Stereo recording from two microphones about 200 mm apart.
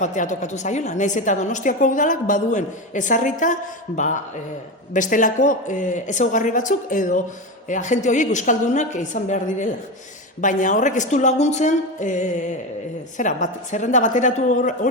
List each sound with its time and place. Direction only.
0.0 s a woman's voice: 35° left (ahead or behind)